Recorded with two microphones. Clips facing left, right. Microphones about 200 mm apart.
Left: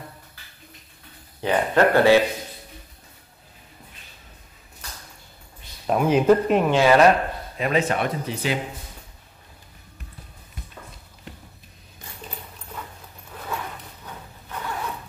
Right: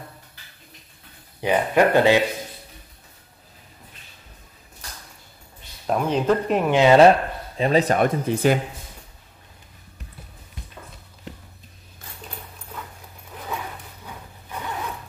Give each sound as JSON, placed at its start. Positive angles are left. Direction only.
{"t": 1.4, "sound": "speech", "side_deg": -15}
{"t": 5.9, "sound": "speech", "side_deg": 5}
{"t": 6.7, "sound": "speech", "side_deg": -20}
{"t": 7.5, "sound": "speech", "side_deg": -30}